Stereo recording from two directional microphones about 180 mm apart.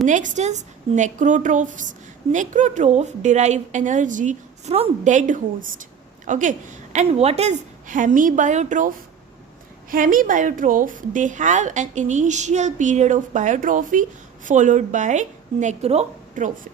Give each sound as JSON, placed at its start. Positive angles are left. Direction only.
{"t": 0.0, "sound": "a woman's voice", "side_deg": -45}